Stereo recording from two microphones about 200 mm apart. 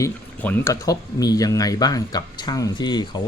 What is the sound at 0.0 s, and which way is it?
Speech, 10° left (ahead or behind).